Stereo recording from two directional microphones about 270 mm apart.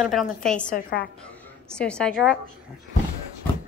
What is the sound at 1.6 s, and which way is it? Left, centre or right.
Speech, centre.